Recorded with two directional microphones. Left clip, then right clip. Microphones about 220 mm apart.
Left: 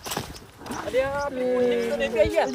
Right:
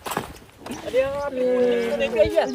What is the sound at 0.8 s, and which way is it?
Speech, 10° left (ahead or behind).